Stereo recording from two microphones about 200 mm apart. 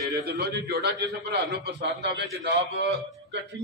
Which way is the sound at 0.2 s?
50° right (ahead or behind).